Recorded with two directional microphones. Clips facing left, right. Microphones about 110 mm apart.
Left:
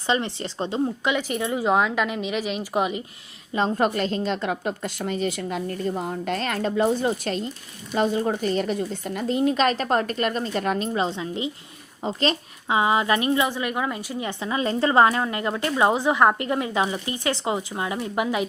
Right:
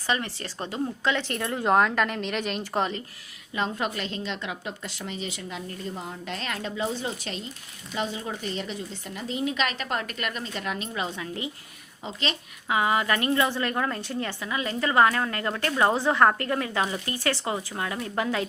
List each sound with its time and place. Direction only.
0.1 s speech: 20° left (ahead or behind)
3.5 s a woman's voice: 35° left (ahead or behind)
12.0 s a woman's voice: 40° left (ahead or behind)
12.6 s a woman's voice: 20° left (ahead or behind)